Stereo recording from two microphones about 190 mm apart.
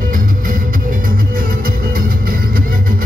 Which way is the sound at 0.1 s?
45° right (ahead or behind).